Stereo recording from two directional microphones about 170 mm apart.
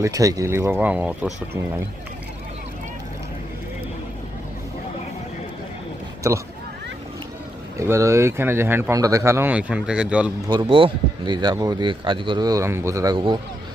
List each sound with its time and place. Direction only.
0.0 s speech: 20° right (ahead or behind)
6.3 s speech: 15° right (ahead or behind)
7.8 s speech: 15° right (ahead or behind)
10.5 s speech: 30° right (ahead or behind)